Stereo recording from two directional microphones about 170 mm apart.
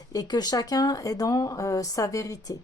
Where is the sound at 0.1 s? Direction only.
25° left (ahead or behind).